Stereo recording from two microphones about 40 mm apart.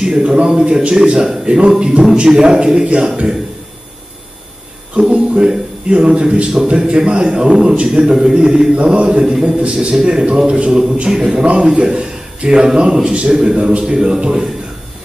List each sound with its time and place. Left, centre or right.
0.0 s a man's voice: right
4.9 s a sound: right
5.5 s a man's voice: right
6.9 s a man's voice: right
8.0 s speech: centre
8.9 s a man's voice: right
9.2 s a man's voice: centre